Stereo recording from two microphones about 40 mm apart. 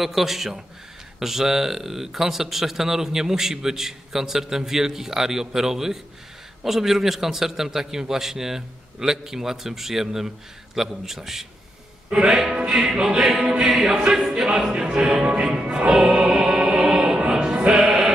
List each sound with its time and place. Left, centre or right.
0.0 s a man's voice: centre
12.1 s music: right
12.8 s a man's voice: centre
14.7 s music: right
15.2 s music: right
17.8 s sheep: centre